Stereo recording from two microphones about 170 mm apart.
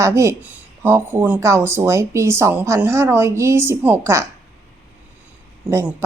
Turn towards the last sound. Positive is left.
turn(degrees=-15)  # may be behind; listen again after turning